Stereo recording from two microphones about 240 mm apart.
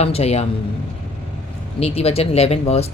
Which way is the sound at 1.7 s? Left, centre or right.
Left.